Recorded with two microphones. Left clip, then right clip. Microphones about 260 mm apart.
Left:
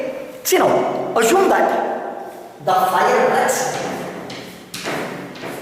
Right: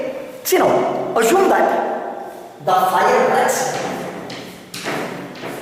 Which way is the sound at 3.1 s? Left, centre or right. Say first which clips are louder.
Right 1 dB; centre.